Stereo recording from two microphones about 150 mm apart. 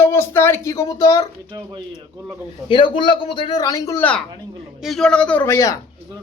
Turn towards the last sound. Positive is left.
turn(degrees=20)  # may be behind; listen again after turning